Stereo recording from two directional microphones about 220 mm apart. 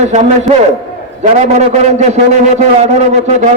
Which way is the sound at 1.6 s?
30° right (ahead or behind).